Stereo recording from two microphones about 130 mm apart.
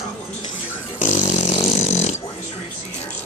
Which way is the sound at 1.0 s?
70° left (ahead or behind).